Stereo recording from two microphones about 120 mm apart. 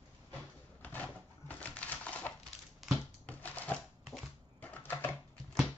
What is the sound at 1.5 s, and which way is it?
Typewriter, 10° left (ahead or behind).